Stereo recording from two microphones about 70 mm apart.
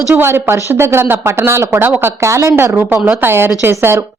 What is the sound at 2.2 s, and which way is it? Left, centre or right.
A woman's voice, right.